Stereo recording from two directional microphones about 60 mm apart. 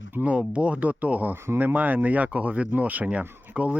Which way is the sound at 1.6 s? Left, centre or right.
Right.